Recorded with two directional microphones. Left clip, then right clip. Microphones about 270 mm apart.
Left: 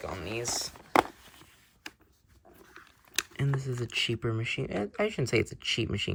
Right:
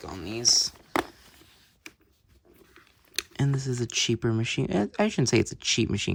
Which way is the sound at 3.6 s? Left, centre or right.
Centre.